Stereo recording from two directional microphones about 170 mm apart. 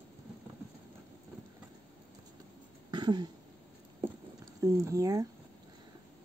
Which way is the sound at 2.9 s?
25° right (ahead or behind).